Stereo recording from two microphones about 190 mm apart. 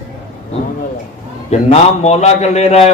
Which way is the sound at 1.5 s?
35° left (ahead or behind).